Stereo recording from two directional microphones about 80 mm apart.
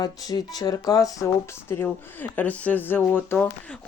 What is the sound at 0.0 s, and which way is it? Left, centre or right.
Speech, left.